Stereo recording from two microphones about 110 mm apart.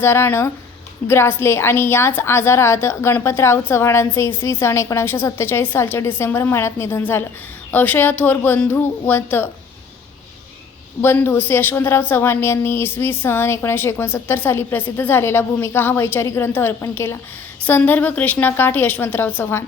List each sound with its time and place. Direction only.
0.0 s a woman's voice: 20° left (ahead or behind)
11.0 s a woman's voice: 20° left (ahead or behind)